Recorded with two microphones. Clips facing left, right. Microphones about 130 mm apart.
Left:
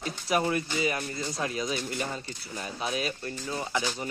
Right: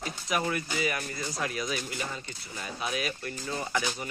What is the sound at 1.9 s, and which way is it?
Speech, 40° left (ahead or behind).